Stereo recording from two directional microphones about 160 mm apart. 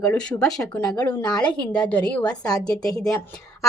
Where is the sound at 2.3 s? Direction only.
25° left (ahead or behind).